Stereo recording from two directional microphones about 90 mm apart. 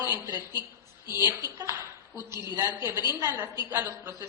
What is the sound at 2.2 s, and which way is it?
A woman's voice, 30° right (ahead or behind).